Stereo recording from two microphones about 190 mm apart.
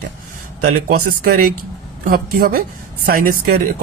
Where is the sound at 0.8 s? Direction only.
50° right (ahead or behind).